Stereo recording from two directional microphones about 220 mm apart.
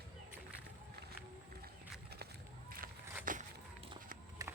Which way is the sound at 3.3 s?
40° right (ahead or behind).